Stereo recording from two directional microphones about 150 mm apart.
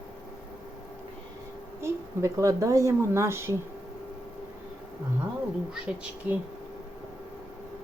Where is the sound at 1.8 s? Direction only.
20° right (ahead or behind).